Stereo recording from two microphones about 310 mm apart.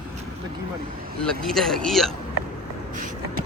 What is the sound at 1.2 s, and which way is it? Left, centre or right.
Speech, centre.